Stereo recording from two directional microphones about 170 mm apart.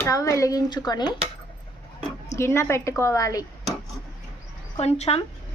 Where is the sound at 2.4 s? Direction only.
15° left (ahead or behind).